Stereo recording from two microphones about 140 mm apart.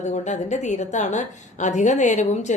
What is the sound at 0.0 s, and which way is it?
A woman's voice, 60° left (ahead or behind).